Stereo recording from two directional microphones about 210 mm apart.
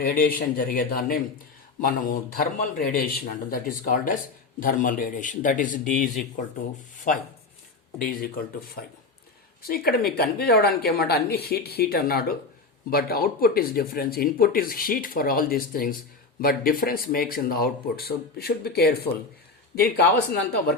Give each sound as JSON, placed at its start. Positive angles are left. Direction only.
{"t": 0.0, "sound": "a man's voice", "side_deg": 45}